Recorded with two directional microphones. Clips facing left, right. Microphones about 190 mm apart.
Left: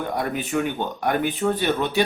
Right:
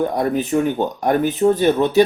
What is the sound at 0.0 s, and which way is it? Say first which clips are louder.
Speech: right 7 dB; 35° right (ahead or behind).